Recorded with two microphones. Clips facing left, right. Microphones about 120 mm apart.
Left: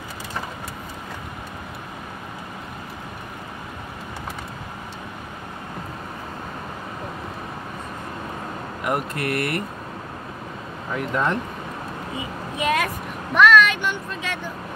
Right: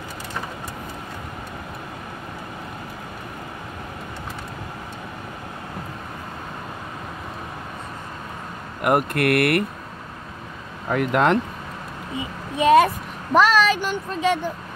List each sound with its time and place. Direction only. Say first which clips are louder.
8.8 s speech: right 6 dB; 60° right (ahead or behind)
10.9 s speech: right 5 dB; 65° right (ahead or behind)
12.5 s a sound: right 8 dB; 35° right (ahead or behind)